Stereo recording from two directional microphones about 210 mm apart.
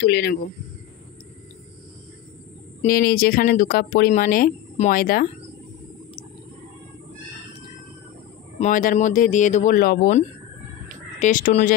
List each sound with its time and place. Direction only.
0.0 s speech: 50° left (ahead or behind)
2.8 s speech: 45° left (ahead or behind)
8.5 s speech: 35° left (ahead or behind)